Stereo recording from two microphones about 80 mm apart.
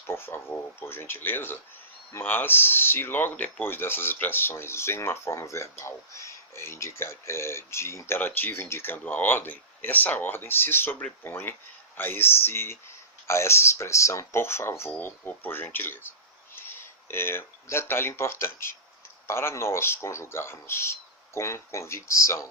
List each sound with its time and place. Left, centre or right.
0.1 s speech: left